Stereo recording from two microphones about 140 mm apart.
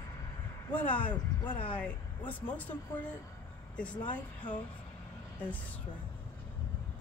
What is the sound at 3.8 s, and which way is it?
Speech, 10° left (ahead or behind).